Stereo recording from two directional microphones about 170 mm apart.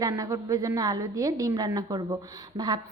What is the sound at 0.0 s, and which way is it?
A woman's voice, 20° right (ahead or behind).